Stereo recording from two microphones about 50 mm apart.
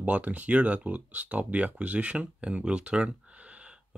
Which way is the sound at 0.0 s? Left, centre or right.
Right.